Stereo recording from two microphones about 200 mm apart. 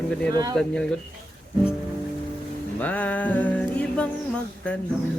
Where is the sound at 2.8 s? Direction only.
5° left (ahead or behind).